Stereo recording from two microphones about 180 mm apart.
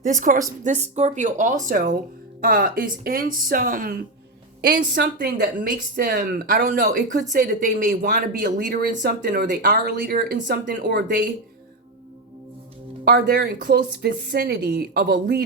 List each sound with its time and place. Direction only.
0.0 s speech: 45° right (ahead or behind)
4.6 s speech: 65° right (ahead or behind)
10.9 s speech: 65° right (ahead or behind)
13.1 s speech: 50° right (ahead or behind)